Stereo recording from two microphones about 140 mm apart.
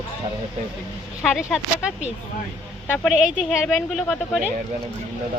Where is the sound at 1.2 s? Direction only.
Centre (ahead or behind).